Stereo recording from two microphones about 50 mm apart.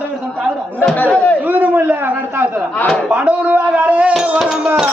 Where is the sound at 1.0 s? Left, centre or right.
Left.